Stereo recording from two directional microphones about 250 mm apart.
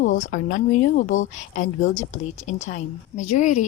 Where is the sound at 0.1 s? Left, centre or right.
Left.